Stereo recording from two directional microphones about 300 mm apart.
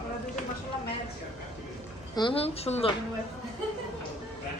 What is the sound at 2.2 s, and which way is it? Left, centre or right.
Speech, centre.